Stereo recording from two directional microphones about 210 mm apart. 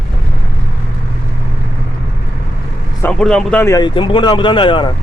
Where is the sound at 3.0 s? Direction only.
5° left (ahead or behind).